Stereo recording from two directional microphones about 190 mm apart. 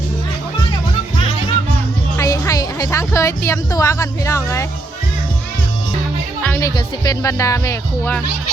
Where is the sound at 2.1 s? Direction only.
15° left (ahead or behind).